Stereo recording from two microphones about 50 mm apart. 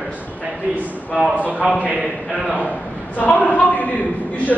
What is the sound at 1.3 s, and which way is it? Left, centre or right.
Speech, right.